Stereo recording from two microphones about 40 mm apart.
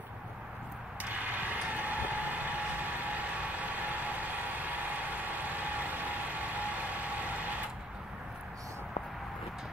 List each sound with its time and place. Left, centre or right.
1.0 s vehicle: right